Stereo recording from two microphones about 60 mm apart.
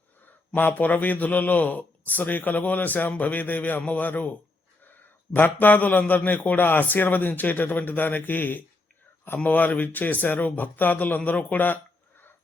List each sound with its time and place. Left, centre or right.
0.5 s a man's voice: left